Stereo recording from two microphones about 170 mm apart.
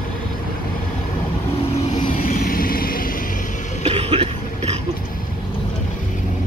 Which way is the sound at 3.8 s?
35° right (ahead or behind).